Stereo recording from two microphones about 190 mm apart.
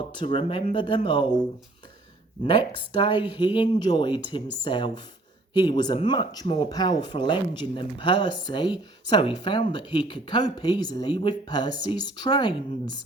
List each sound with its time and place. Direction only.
0.0 s speech: 25° left (ahead or behind)
2.5 s speech: 25° left (ahead or behind)